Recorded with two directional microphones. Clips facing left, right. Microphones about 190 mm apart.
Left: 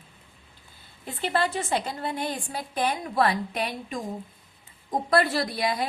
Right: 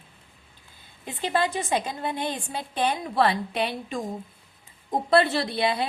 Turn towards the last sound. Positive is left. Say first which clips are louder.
# right 2 dB
turn(degrees=-25)  # may be behind; listen again after turning